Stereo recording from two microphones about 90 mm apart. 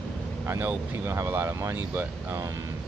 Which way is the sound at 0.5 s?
25° right (ahead or behind).